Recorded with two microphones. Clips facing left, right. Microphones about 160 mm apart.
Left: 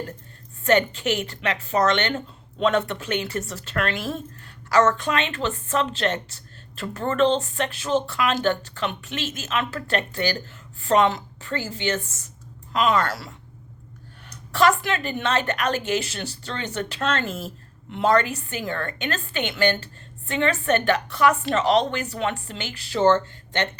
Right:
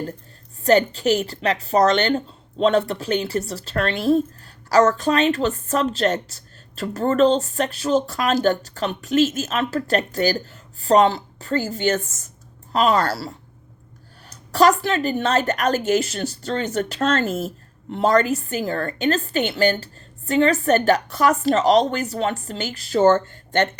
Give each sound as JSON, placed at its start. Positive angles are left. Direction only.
{"t": 0.6, "sound": "a woman's voice", "side_deg": -35}
{"t": 14.5, "sound": "a woman's voice", "side_deg": -40}